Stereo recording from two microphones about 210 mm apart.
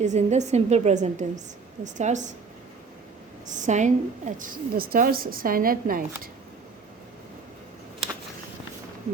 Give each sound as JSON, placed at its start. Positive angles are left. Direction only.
{"t": 0.0, "sound": "a woman's voice", "side_deg": -35}
{"t": 3.4, "sound": "a woman's voice", "side_deg": -35}